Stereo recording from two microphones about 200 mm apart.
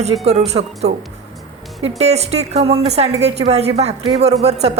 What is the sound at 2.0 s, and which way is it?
A woman's voice, 35° right (ahead or behind).